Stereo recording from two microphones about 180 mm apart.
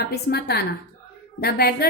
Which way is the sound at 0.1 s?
65° left (ahead or behind).